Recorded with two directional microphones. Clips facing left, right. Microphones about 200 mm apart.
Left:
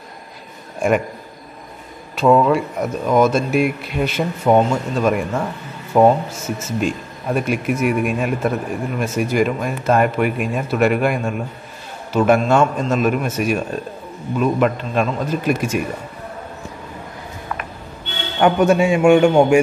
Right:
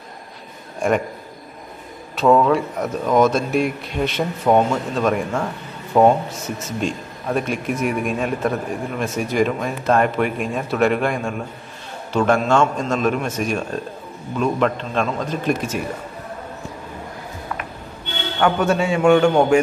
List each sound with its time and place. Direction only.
2.1 s a man's voice: centre (ahead or behind)
18.4 s a man's voice: 15° left (ahead or behind)